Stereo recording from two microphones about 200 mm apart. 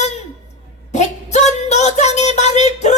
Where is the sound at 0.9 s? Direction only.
35° left (ahead or behind).